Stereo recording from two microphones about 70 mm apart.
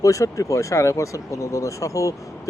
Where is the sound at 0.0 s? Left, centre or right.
Left.